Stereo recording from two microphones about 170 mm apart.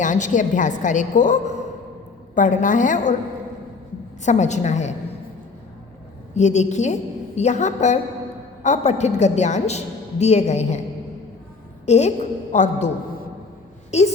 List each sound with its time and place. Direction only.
0.0 s a woman's voice: 45° left (ahead or behind)
4.2 s a woman's voice: 45° left (ahead or behind)
6.3 s a woman's voice: 40° left (ahead or behind)
11.9 s a woman's voice: 40° left (ahead or behind)